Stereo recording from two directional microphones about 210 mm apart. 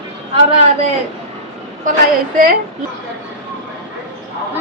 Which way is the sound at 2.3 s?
40° right (ahead or behind).